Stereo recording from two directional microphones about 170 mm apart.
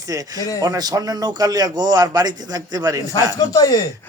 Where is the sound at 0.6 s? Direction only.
20° right (ahead or behind).